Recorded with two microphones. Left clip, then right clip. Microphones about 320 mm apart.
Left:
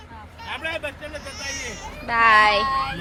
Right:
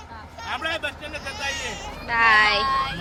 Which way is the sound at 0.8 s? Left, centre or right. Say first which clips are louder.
Right 2 dB; centre.